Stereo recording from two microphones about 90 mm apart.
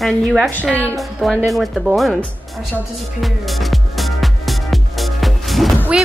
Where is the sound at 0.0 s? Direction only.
10° right (ahead or behind).